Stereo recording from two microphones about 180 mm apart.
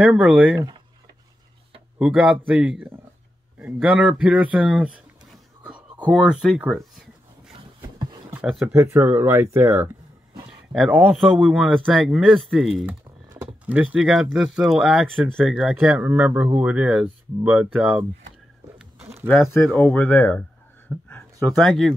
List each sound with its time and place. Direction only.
0.0 s speech: 10° right (ahead or behind)
0.6 s speech: 25° right (ahead or behind)
2.0 s speech: 5° right (ahead or behind)
5.3 s a sound: 5° right (ahead or behind)
6.0 s speech: 5° right (ahead or behind)
8.3 s speech: 10° right (ahead or behind)
19.2 s speech: centre (ahead or behind)
21.1 s a sound: 5° left (ahead or behind)